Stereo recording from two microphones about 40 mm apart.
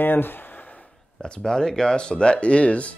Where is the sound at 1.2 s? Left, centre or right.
Centre.